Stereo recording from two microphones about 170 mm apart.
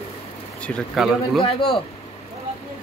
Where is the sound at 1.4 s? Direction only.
30° left (ahead or behind).